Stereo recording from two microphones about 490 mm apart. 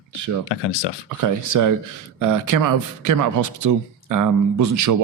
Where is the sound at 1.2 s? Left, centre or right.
Right.